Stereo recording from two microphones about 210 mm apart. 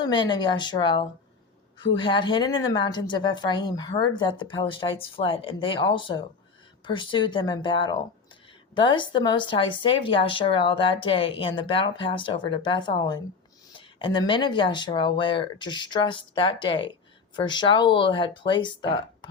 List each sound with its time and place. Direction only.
0.0 s speech: 20° left (ahead or behind)